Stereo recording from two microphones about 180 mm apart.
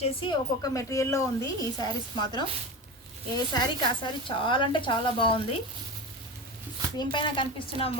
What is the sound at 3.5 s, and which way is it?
A woman's voice, 25° left (ahead or behind).